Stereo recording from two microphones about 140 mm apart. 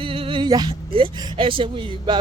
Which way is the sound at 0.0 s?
40° right (ahead or behind).